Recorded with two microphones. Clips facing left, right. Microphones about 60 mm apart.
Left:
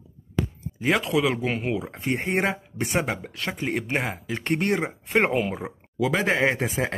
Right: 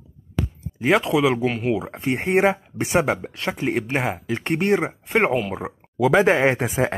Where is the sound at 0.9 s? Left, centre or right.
Centre.